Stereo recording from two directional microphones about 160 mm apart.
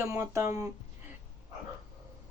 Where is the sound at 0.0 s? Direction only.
15° right (ahead or behind).